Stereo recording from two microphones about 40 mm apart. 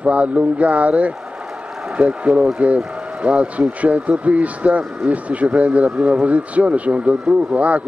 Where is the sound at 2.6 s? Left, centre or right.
Right.